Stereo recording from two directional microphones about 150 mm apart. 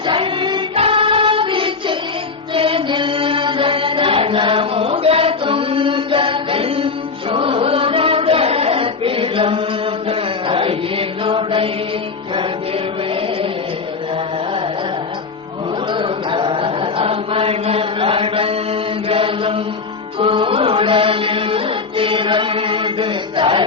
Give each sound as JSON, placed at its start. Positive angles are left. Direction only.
{"t": 0.1, "sound": "singing", "side_deg": -35}
{"t": 2.6, "sound": "chant", "side_deg": -35}
{"t": 15.9, "sound": "chant", "side_deg": -35}
{"t": 20.1, "sound": "music", "side_deg": -35}